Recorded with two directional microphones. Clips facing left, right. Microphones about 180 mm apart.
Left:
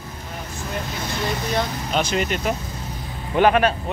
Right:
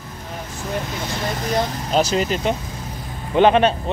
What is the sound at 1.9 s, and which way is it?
Speech, 35° right (ahead or behind).